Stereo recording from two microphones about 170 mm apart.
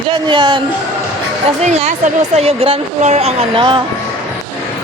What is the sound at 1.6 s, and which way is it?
Speech, 40° right (ahead or behind).